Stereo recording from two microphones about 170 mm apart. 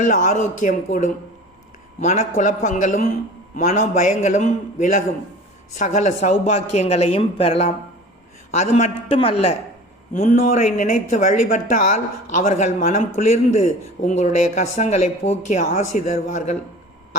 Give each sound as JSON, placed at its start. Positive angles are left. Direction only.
{"t": 0.0, "sound": "speech", "side_deg": 50}